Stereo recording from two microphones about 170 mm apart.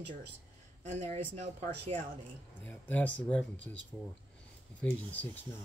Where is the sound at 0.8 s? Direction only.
45° right (ahead or behind).